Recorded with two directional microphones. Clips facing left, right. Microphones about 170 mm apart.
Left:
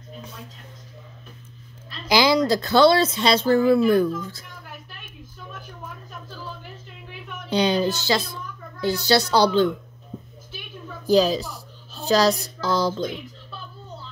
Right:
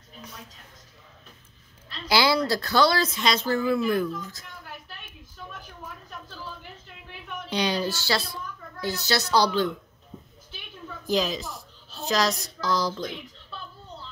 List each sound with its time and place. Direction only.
2.0 s speech: 20° left (ahead or behind)
7.5 s speech: 25° left (ahead or behind)
8.8 s speech: 30° left (ahead or behind)
11.1 s a child's voice: 35° left (ahead or behind)